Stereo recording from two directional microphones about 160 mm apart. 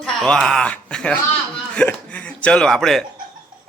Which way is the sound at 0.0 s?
5° left (ahead or behind).